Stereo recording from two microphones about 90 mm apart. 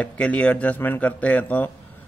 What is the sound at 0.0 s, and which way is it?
Speech, 15° left (ahead or behind).